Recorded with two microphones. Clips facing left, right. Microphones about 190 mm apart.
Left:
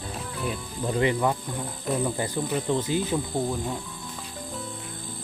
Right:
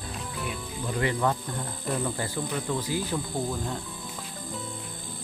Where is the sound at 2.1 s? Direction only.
20° left (ahead or behind).